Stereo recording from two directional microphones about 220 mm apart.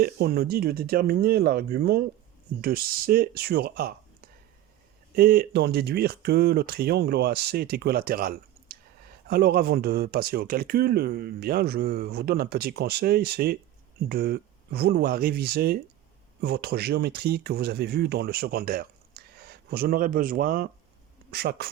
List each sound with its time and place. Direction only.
0.0 s speech: 45° right (ahead or behind)